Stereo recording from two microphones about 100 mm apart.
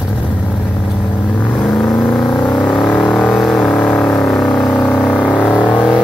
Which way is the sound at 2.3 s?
50° left (ahead or behind).